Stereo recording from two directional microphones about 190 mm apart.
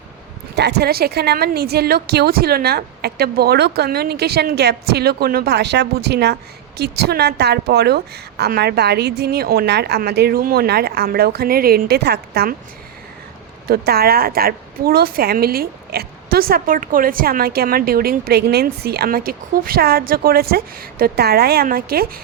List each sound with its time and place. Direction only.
0.5 s a woman's voice: 60° right (ahead or behind)
13.7 s a woman's voice: 55° right (ahead or behind)